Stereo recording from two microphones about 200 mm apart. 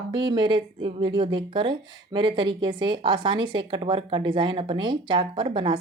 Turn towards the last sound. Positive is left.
turn(degrees=-25)  # may be behind; listen again after turning